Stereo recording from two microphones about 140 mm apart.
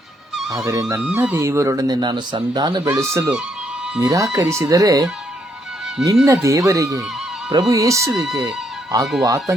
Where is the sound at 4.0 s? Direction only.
25° right (ahead or behind).